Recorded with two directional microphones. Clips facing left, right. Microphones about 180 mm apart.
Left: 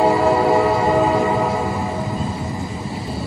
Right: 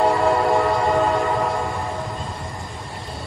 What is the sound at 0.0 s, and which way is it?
Train, centre (ahead or behind).